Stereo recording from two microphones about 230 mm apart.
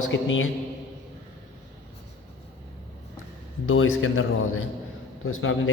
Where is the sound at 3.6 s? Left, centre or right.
Left.